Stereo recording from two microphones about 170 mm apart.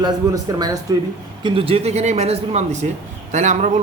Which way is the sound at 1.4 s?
35° right (ahead or behind).